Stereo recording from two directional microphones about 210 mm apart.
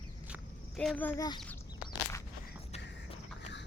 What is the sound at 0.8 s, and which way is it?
Speech, 5° left (ahead or behind).